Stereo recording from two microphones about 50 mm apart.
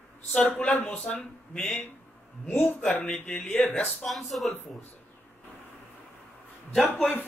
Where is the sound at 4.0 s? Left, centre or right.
Centre.